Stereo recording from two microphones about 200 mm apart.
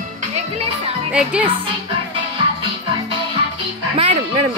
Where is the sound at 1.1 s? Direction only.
5° right (ahead or behind).